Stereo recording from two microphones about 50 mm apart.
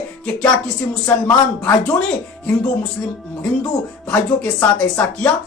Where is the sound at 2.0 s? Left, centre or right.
Left.